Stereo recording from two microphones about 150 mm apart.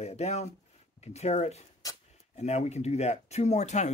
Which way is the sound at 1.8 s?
25° left (ahead or behind).